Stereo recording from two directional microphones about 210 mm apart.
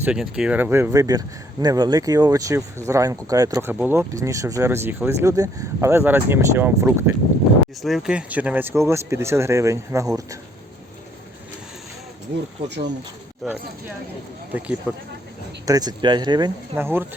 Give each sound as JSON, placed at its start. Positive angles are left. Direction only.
{"t": 0.0, "sound": "speech", "side_deg": -5}
{"t": 7.8, "sound": "speech", "side_deg": 0}
{"t": 12.6, "sound": "speech", "side_deg": -55}
{"t": 13.4, "sound": "speech", "side_deg": 0}
{"t": 14.9, "sound": "speech", "side_deg": -10}